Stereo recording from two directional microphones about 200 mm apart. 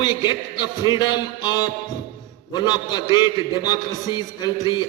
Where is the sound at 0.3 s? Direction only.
20° left (ahead or behind).